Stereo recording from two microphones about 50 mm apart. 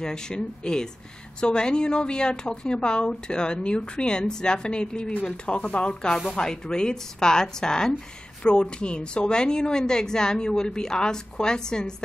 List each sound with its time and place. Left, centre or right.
0.0 s a woman's voice: centre